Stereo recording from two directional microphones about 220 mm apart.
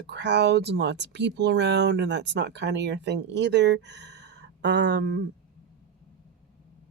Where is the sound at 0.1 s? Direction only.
50° right (ahead or behind).